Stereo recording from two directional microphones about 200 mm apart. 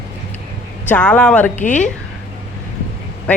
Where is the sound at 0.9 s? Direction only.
5° left (ahead or behind).